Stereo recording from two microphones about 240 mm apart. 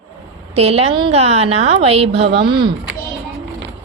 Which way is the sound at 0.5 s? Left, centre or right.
Right.